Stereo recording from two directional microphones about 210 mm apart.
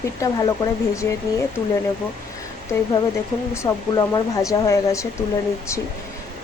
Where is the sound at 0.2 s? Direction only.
20° left (ahead or behind).